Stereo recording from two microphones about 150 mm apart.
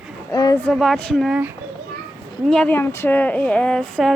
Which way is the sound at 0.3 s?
25° left (ahead or behind).